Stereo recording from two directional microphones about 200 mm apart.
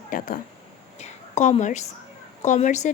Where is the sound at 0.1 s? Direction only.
40° left (ahead or behind).